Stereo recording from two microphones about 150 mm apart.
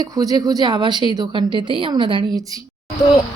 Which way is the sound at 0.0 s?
25° right (ahead or behind).